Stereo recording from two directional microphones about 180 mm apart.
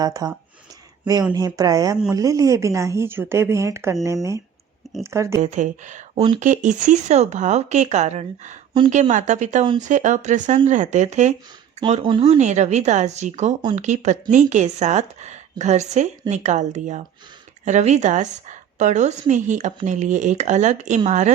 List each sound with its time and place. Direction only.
0.0 s speech: 20° right (ahead or behind)
1.3 s speech: 20° right (ahead or behind)
5.4 s speech: 40° right (ahead or behind)